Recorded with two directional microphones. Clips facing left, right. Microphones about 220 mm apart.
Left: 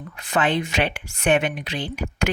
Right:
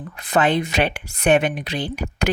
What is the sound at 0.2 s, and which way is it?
Speech, 40° right (ahead or behind).